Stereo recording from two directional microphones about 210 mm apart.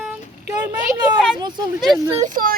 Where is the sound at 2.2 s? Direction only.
40° right (ahead or behind).